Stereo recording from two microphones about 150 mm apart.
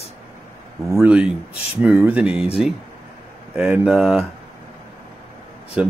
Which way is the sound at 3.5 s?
10° right (ahead or behind).